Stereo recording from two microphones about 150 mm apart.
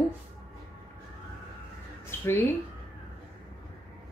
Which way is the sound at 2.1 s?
15° left (ahead or behind).